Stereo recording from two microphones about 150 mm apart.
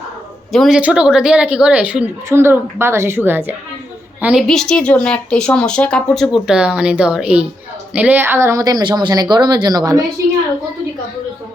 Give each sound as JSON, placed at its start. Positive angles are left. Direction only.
{"t": 0.5, "sound": "a woman's voice", "side_deg": 0}
{"t": 4.4, "sound": "a woman's voice", "side_deg": 5}